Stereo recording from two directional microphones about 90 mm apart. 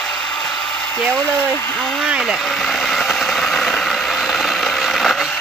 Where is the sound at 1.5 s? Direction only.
15° left (ahead or behind).